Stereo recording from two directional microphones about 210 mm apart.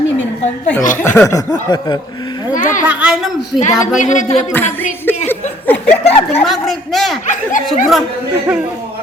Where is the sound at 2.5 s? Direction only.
40° left (ahead or behind).